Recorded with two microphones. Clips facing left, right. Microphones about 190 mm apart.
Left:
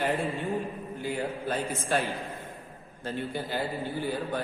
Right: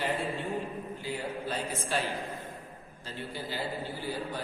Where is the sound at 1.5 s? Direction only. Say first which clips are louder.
Left 4 dB; 50° left (ahead or behind).